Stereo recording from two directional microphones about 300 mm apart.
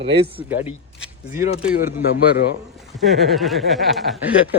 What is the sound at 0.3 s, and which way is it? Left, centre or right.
Speech, centre.